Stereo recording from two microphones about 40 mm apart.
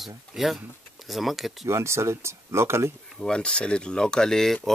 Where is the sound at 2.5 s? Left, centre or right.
Right.